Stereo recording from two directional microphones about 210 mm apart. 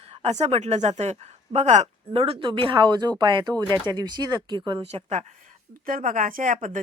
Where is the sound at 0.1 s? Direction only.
30° right (ahead or behind).